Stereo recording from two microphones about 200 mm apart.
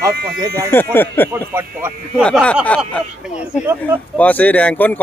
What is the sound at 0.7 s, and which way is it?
Speech, 10° left (ahead or behind).